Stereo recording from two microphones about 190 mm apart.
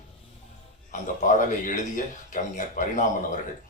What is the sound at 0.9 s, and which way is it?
Speech, 40° left (ahead or behind).